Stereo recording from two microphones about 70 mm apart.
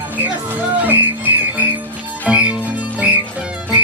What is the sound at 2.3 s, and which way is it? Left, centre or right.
Music, centre.